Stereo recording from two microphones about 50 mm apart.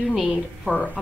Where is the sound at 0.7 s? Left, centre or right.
Left.